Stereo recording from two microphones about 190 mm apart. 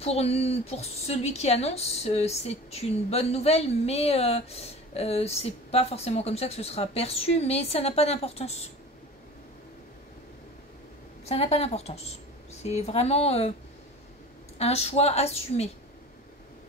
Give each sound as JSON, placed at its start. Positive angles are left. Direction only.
{"t": 0.0, "sound": "a woman's voice", "side_deg": 35}
{"t": 11.2, "sound": "a woman's voice", "side_deg": 35}
{"t": 14.6, "sound": "a woman's voice", "side_deg": 35}